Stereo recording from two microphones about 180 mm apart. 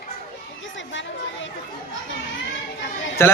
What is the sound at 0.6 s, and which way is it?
Chatter, 90° left.